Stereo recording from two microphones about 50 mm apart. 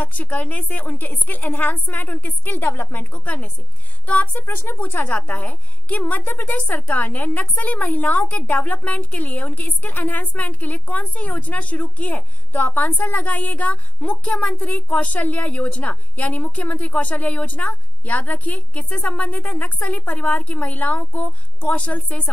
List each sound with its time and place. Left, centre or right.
0.0 s a woman's voice: left
4.6 s a woman's voice: left